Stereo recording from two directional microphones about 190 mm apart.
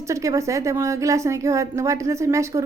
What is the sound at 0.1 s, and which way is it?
A woman's voice, 15° right (ahead or behind).